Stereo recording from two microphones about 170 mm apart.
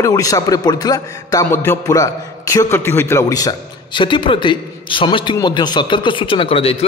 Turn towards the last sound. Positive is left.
turn(degrees=35)  # may be behind; listen again after turning